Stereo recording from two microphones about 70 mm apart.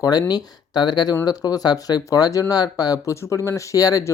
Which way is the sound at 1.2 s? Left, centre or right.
Left.